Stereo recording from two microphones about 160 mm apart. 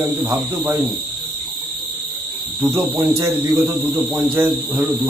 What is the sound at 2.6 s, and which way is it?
Speech, 15° right (ahead or behind).